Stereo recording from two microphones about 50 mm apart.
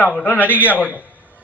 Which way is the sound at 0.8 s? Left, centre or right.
Left.